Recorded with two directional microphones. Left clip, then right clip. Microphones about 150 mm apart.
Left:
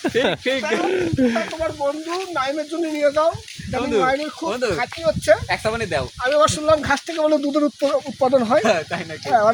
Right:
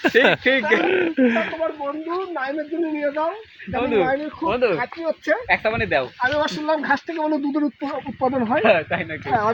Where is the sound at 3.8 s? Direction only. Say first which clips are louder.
Left 1 dB; 50° right (ahead or behind).